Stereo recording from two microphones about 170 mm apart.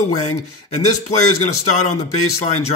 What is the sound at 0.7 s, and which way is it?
Speech, 45° left (ahead or behind).